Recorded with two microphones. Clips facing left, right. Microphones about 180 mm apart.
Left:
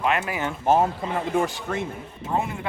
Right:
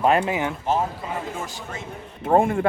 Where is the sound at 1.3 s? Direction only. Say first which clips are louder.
Left 8 dB; 60° left (ahead or behind).